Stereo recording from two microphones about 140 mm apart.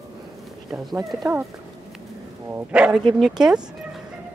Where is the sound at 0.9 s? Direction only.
20° right (ahead or behind).